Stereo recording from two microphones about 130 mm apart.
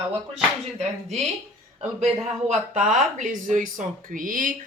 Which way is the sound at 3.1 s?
75° right (ahead or behind).